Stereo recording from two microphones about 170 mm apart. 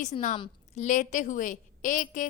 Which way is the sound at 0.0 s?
45° left (ahead or behind).